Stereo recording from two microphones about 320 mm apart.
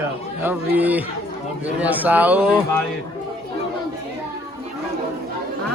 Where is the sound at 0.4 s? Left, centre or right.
Centre.